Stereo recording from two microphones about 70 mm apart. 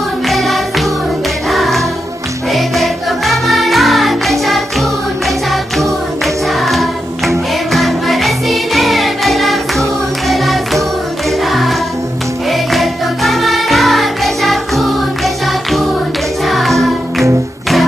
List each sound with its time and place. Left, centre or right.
0.3 s music: centre
6.6 s music: centre
12.4 s music: centre